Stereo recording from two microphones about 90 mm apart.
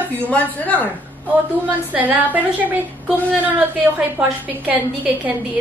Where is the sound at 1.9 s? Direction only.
20° right (ahead or behind).